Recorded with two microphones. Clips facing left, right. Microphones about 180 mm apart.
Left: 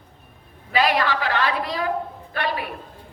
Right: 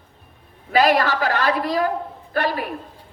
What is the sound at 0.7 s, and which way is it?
A man's voice, 40° right (ahead or behind).